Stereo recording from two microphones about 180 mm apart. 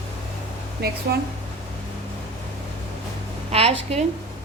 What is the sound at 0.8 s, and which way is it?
Speech, 60° right (ahead or behind).